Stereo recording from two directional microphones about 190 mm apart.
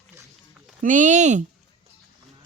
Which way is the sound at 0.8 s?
40° right (ahead or behind).